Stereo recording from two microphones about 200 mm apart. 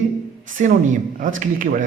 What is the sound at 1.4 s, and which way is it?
Speech, 40° right (ahead or behind).